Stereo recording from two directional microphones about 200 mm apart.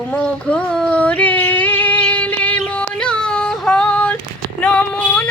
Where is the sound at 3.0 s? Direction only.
5° left (ahead or behind).